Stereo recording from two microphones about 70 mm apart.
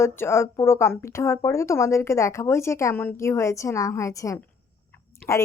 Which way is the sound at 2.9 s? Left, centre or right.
Left.